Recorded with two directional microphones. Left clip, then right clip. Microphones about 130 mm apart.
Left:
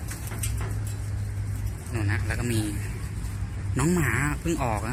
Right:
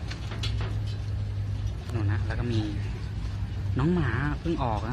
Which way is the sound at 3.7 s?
25° left (ahead or behind).